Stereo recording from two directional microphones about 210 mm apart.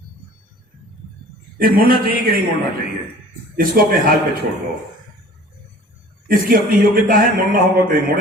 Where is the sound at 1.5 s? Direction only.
45° right (ahead or behind).